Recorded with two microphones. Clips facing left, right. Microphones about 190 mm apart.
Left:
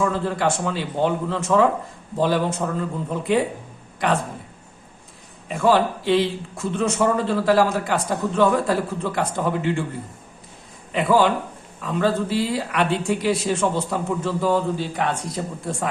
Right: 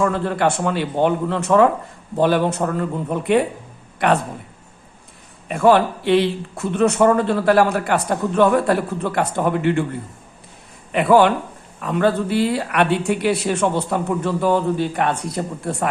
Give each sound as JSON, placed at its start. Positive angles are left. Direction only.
{"t": 0.0, "sound": "speech", "side_deg": -60}
{"t": 5.5, "sound": "speech", "side_deg": -60}
{"t": 10.9, "sound": "speech", "side_deg": -60}